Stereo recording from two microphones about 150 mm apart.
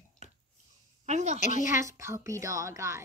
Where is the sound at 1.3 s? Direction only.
55° left (ahead or behind).